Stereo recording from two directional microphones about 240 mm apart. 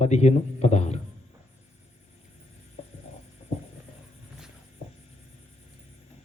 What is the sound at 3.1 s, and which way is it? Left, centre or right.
Hum, left.